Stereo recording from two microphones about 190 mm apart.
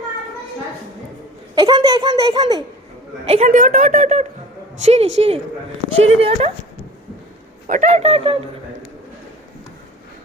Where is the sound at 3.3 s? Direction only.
40° right (ahead or behind).